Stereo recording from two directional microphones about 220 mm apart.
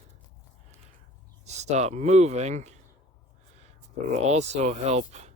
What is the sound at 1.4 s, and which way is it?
Speech, 30° right (ahead or behind).